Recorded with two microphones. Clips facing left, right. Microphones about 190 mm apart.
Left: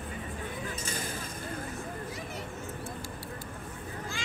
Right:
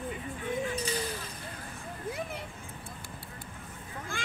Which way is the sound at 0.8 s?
50° left (ahead or behind).